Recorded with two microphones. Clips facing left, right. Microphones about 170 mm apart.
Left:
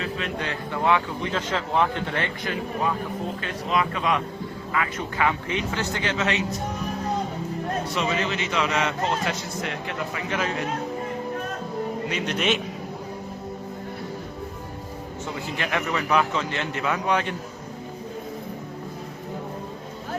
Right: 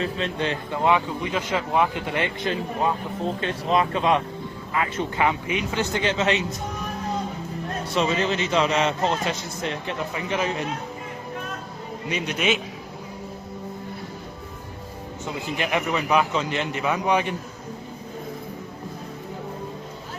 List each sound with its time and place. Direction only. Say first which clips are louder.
0.0 s speech: right 3 dB; 30° right (ahead or behind)
3.4 s a man's voice: right 3 dB; 30° right (ahead or behind)
7.9 s a man's voice: right 6 dB; 30° right (ahead or behind)
12.0 s speech: right 3 dB; 15° right (ahead or behind)
15.5 s speech: right 2 dB; 15° right (ahead or behind)